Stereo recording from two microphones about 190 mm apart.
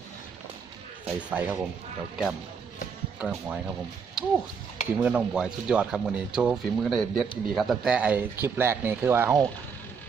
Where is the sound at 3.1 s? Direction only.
5° right (ahead or behind).